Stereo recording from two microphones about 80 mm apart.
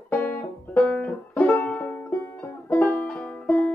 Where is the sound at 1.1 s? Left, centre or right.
Left.